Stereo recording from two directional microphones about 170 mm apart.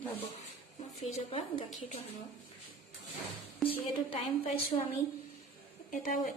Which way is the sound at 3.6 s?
30° left (ahead or behind).